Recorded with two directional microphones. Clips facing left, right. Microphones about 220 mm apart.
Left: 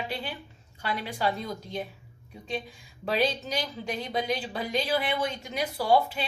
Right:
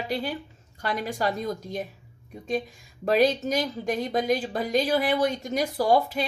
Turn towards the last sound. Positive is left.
turn(degrees=-45)  # may be behind; listen again after turning